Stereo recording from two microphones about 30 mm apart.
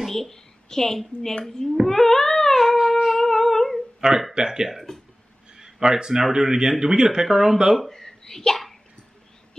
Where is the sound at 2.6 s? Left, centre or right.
Centre.